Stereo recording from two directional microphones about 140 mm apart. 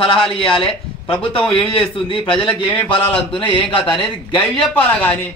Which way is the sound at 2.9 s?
40° left (ahead or behind).